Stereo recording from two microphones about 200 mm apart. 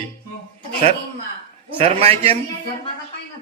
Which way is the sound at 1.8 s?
30° right (ahead or behind).